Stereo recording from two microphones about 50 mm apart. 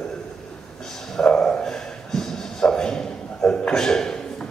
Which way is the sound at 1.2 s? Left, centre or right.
Centre.